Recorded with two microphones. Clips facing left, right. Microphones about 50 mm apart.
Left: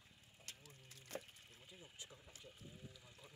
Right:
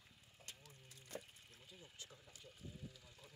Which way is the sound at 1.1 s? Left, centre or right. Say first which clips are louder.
Left 1 dB; left.